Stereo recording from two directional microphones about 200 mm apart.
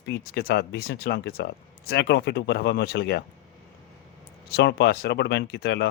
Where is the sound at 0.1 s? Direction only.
50° left (ahead or behind).